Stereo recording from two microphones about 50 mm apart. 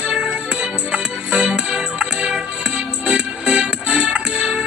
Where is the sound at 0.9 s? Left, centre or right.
Centre.